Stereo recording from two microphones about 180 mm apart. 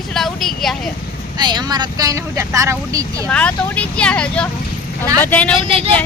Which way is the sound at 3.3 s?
5° left (ahead or behind).